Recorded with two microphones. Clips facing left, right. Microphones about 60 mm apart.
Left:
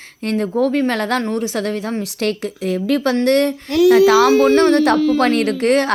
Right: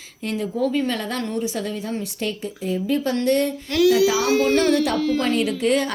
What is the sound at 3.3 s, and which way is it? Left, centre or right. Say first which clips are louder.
A woman's voice: left 5 dB; left.